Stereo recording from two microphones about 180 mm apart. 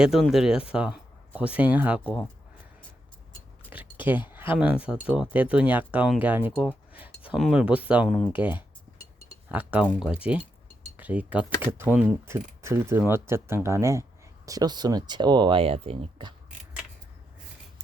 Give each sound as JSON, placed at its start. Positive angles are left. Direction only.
{"t": 0.0, "sound": "speech", "side_deg": 0}
{"t": 3.7, "sound": "a sound", "side_deg": -10}
{"t": 4.3, "sound": "speech", "side_deg": -10}
{"t": 8.3, "sound": "speech", "side_deg": -10}
{"t": 10.9, "sound": "speech", "side_deg": -10}